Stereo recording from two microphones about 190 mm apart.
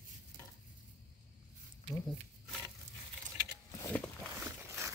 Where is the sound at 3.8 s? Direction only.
10° left (ahead or behind).